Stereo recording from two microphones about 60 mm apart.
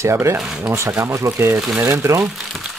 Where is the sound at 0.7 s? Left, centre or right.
Right.